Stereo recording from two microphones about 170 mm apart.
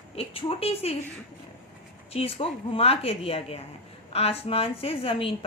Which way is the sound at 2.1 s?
35° left (ahead or behind).